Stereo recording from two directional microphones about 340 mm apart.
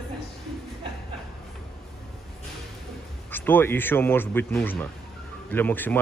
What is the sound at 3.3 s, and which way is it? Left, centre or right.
A man's voice, centre.